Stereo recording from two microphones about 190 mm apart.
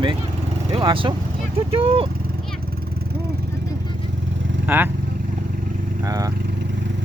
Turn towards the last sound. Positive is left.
turn(degrees=-20)  # may be behind; listen again after turning